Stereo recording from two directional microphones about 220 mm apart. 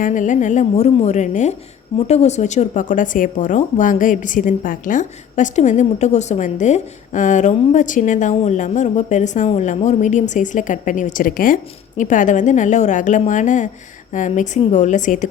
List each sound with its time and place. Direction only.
0.0 s speech: 35° left (ahead or behind)